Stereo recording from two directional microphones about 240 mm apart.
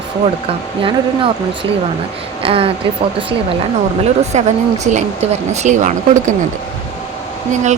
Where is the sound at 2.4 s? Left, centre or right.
Right.